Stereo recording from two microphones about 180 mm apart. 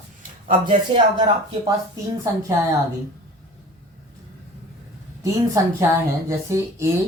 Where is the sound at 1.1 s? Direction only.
25° right (ahead or behind).